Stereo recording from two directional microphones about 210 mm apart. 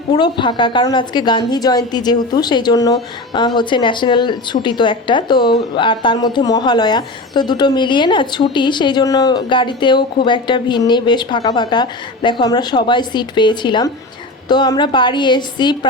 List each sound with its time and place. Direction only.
0.1 s a woman's voice: 20° left (ahead or behind)